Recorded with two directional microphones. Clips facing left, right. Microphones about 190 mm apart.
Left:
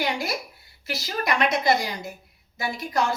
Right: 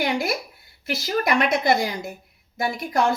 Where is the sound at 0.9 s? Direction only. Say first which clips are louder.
Right 4 dB; 50° right (ahead or behind).